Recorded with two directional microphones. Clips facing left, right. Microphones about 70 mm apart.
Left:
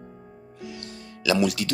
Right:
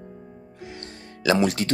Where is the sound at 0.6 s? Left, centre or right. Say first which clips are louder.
Left 1 dB; right.